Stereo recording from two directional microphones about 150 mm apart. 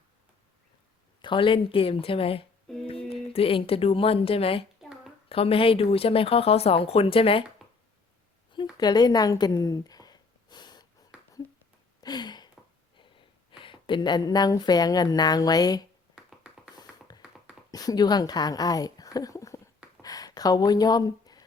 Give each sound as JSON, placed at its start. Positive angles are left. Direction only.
{"t": 1.2, "sound": "speech", "side_deg": 35}
{"t": 4.8, "sound": "a sound", "side_deg": 0}
{"t": 5.3, "sound": "speech", "side_deg": 40}
{"t": 8.8, "sound": "gasp", "side_deg": 25}
{"t": 11.9, "sound": "a sound", "side_deg": 25}
{"t": 13.0, "sound": "speech", "side_deg": 35}
{"t": 16.7, "sound": "music", "side_deg": 25}
{"t": 17.7, "sound": "a woman's voice", "side_deg": 25}
{"t": 20.0, "sound": "gasp", "side_deg": 25}